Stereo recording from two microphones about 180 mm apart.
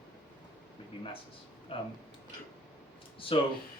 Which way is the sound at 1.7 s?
30° left (ahead or behind).